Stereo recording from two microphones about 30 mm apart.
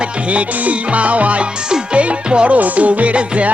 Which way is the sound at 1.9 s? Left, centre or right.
Right.